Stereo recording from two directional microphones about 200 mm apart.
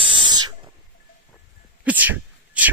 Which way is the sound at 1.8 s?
10° right (ahead or behind).